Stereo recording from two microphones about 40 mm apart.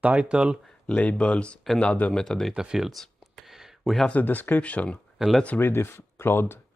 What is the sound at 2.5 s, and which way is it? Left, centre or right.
Speech, centre.